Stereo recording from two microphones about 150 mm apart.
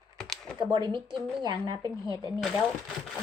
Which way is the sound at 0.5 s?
30° right (ahead or behind).